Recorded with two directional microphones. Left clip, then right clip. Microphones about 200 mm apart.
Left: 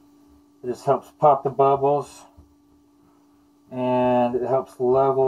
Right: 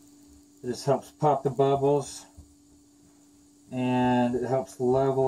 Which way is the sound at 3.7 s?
50° right (ahead or behind).